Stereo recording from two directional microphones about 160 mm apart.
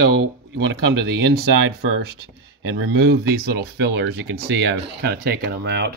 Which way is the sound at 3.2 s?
80° right.